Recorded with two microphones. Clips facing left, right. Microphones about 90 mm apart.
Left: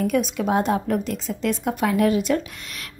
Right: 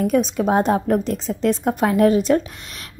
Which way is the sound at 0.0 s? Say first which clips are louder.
Right 4 dB; 30° right (ahead or behind).